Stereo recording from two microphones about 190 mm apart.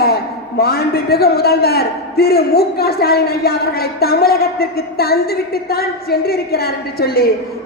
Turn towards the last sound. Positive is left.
turn(degrees=55)  # may be behind; listen again after turning